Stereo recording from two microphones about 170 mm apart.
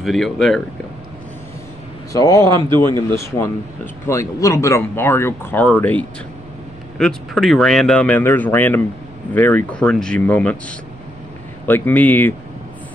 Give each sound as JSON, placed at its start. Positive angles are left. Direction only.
{"t": 0.0, "sound": "speech", "side_deg": 0}
{"t": 2.1, "sound": "a man's voice", "side_deg": 20}
{"t": 2.4, "sound": "a man's voice", "side_deg": -25}
{"t": 3.0, "sound": "speech", "side_deg": 15}
{"t": 11.6, "sound": "speech", "side_deg": 10}